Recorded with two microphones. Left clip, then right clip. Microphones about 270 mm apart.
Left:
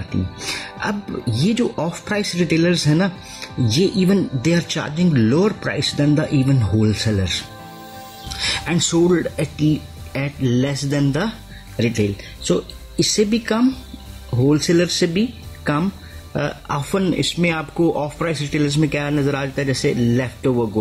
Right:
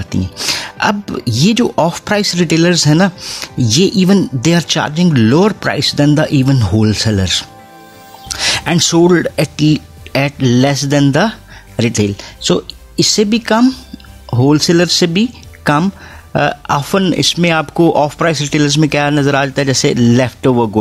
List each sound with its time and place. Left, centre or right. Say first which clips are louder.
0.1 s speech: right 9 dB; right